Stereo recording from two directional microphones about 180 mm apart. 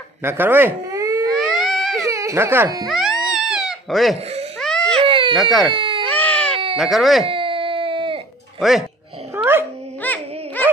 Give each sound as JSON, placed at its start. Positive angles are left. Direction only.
{"t": 0.2, "sound": "speech", "side_deg": -10}
{"t": 1.6, "sound": "baby cry", "side_deg": 0}
{"t": 2.0, "sound": "speech", "side_deg": -15}
{"t": 2.9, "sound": "cat", "side_deg": 0}
{"t": 4.6, "sound": "baby cry", "side_deg": 5}
{"t": 5.0, "sound": "baby cry", "side_deg": -30}
{"t": 5.3, "sound": "speech", "side_deg": 0}
{"t": 5.7, "sound": "speech", "side_deg": -30}
{"t": 6.0, "sound": "baby cry", "side_deg": 10}
{"t": 6.8, "sound": "speech", "side_deg": 0}
{"t": 7.2, "sound": "baby cry", "side_deg": -30}
{"t": 8.5, "sound": "speech", "side_deg": 0}
{"t": 9.3, "sound": "dog", "side_deg": -10}
{"t": 10.0, "sound": "dog", "side_deg": 10}